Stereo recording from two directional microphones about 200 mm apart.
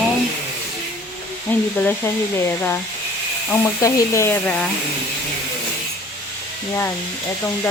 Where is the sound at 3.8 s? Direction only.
15° left (ahead or behind).